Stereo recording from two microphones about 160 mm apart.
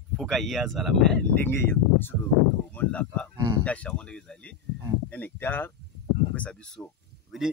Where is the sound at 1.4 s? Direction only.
15° left (ahead or behind).